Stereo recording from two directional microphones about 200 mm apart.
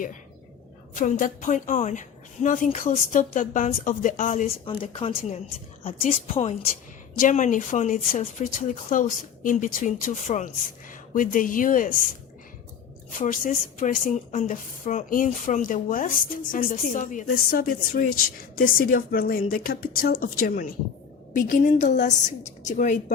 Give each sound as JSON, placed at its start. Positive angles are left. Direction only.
{"t": 0.9, "sound": "a woman's voice", "side_deg": 40}
{"t": 4.6, "sound": "speech", "side_deg": 25}
{"t": 6.0, "sound": "a woman's voice", "side_deg": 40}
{"t": 13.1, "sound": "a woman's voice", "side_deg": 40}